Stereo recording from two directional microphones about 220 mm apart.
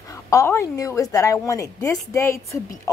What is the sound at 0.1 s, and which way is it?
A woman's voice, 15° left (ahead or behind).